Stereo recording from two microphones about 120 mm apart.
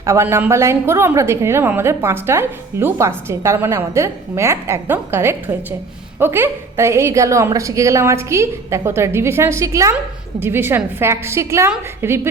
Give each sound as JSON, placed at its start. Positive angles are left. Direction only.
{"t": 0.0, "sound": "a woman's voice", "side_deg": -20}